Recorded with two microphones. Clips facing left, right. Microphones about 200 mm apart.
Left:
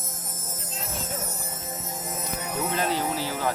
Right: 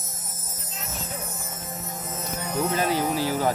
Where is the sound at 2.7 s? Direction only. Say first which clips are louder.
Right 2 dB; 10° right (ahead or behind).